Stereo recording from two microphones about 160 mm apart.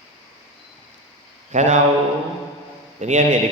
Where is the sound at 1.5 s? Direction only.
50° right (ahead or behind).